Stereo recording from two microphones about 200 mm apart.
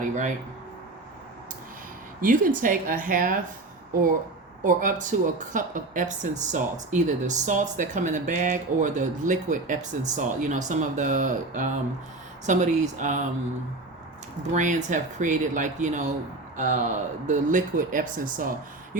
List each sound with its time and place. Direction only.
2.2 s a woman's voice: 40° right (ahead or behind)
4.6 s speech: 40° right (ahead or behind)
14.5 s speech: 40° right (ahead or behind)